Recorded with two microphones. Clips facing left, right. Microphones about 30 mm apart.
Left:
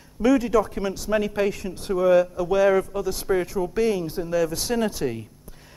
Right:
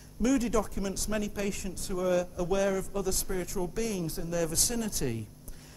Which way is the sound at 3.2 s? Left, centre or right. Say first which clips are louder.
Left 12 dB; left.